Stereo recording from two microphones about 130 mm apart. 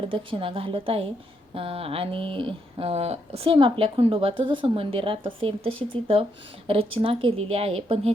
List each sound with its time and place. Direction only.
0.1 s speech: 40° right (ahead or behind)